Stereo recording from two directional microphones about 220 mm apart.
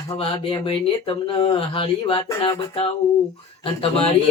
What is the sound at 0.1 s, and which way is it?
Mantra, 20° left (ahead or behind).